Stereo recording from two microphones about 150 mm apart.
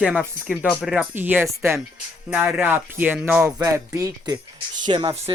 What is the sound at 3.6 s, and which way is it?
Speech, 20° right (ahead or behind).